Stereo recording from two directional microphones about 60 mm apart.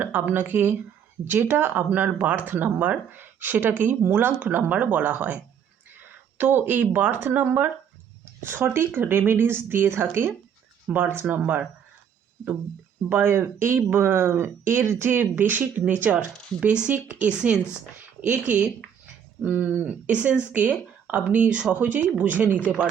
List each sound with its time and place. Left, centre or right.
0.0 s speech: right
13.1 s speech: right
16.1 s speech: centre